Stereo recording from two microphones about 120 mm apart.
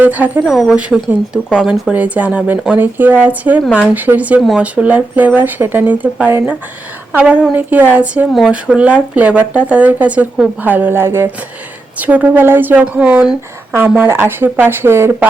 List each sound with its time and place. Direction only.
0.0 s speech: 15° right (ahead or behind)
0.5 s speech: 5° right (ahead or behind); by 15.3 s 20° right (ahead or behind)